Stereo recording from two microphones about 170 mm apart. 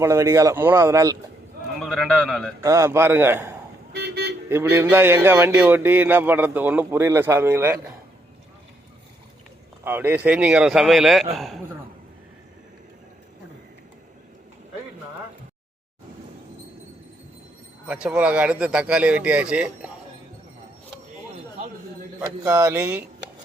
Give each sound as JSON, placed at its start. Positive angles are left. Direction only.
{"t": 0.0, "sound": "speech", "side_deg": -15}
{"t": 1.8, "sound": "a man's voice", "side_deg": 0}
{"t": 2.6, "sound": "speech", "side_deg": -15}
{"t": 3.9, "sound": "car alarm", "side_deg": -75}
{"t": 4.4, "sound": "speech", "side_deg": -15}
{"t": 9.8, "sound": "a man's voice", "side_deg": -10}
{"t": 17.8, "sound": "speech", "side_deg": -5}
{"t": 22.4, "sound": "speech", "side_deg": -15}